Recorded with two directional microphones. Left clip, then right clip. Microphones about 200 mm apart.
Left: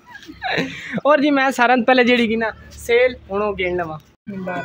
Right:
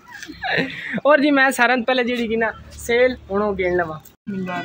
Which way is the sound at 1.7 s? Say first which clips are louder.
Left 4 dB; 20° left (ahead or behind).